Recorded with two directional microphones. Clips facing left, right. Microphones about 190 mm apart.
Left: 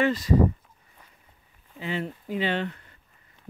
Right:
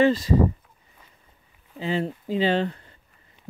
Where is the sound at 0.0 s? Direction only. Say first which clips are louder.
Right 3 dB; 30° right (ahead or behind).